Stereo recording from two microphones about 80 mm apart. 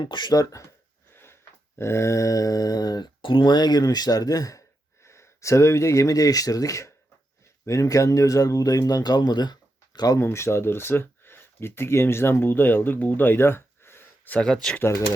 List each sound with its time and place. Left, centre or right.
0.0 s speech: left
1.1 s sniff: left
1.8 s speech: left
5.0 s speech: left
10.2 s speech: left
14.3 s speech: centre